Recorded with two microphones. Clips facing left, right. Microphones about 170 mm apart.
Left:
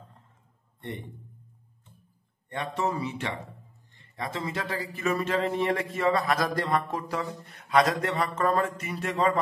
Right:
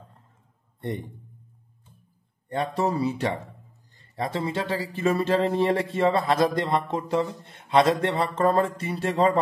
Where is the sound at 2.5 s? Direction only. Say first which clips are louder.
Right 4 dB; 35° right (ahead or behind).